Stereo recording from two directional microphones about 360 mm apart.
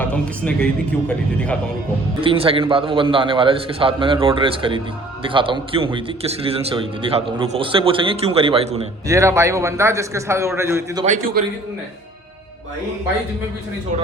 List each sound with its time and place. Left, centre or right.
0.0 s speech: centre
2.2 s a man's voice: centre
11.4 s a man's voice: right